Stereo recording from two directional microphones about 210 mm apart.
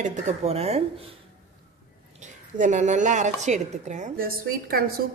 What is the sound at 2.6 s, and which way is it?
Speech, 35° right (ahead or behind).